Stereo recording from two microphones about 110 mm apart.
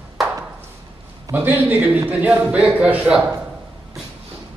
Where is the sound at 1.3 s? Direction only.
15° right (ahead or behind).